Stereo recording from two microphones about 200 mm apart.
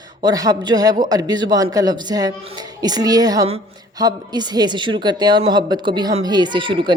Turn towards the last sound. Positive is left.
turn(degrees=-25)  # may be behind; listen again after turning